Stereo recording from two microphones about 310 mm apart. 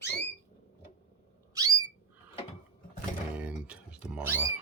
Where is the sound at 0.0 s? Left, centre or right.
Left.